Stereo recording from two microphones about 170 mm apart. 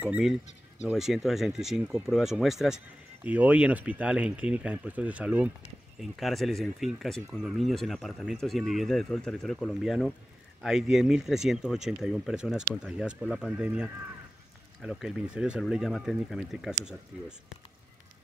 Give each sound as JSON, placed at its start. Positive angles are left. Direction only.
{"t": 0.0, "sound": "speech", "side_deg": -5}